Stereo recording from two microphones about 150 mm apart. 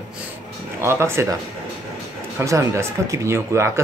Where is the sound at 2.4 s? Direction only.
20° right (ahead or behind).